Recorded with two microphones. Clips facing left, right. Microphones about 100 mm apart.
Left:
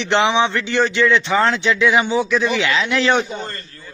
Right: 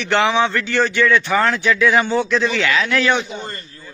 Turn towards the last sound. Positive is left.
turn(degrees=35)  # may be behind; listen again after turning